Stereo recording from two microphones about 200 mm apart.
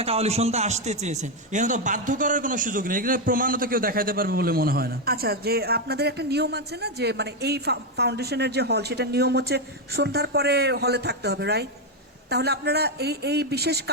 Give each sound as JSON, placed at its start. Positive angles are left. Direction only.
{"t": 0.0, "sound": "a man's voice", "side_deg": -30}